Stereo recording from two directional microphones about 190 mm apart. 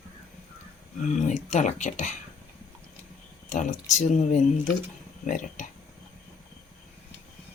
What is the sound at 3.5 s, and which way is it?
Speech, 40° left (ahead or behind).